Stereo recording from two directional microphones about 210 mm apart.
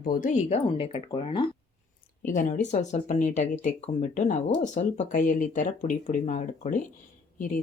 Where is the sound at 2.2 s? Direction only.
40° left (ahead or behind).